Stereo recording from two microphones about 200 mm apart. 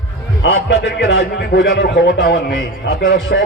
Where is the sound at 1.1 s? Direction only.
55° left (ahead or behind).